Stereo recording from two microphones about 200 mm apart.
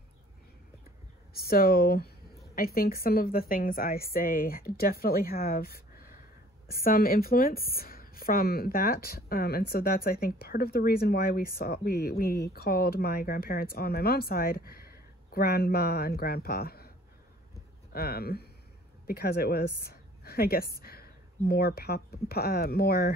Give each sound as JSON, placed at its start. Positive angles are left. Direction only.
{"t": 1.3, "sound": "speech", "side_deg": 50}
{"t": 17.9, "sound": "a woman's voice", "side_deg": 50}